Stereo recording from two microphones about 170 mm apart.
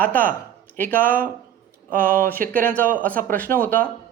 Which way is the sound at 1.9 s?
55° right (ahead or behind).